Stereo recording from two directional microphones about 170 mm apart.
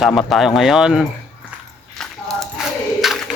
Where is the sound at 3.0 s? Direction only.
Centre (ahead or behind).